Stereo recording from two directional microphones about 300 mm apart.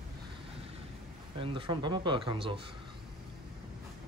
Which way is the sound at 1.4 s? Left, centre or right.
Centre.